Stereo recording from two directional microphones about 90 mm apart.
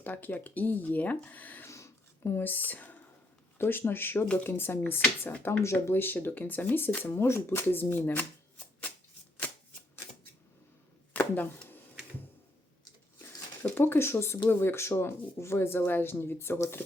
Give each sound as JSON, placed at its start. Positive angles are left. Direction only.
{"t": 0.0, "sound": "speech", "side_deg": 20}
{"t": 1.6, "sound": "a sound", "side_deg": 30}
{"t": 3.6, "sound": "speech", "side_deg": 25}
{"t": 11.1, "sound": "chopping", "side_deg": 15}
{"t": 13.7, "sound": "speech", "side_deg": 25}